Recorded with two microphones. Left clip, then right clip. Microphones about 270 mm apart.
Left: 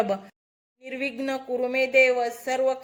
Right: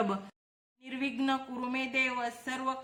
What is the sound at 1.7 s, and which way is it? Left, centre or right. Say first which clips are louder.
Speech: left 12 dB; right.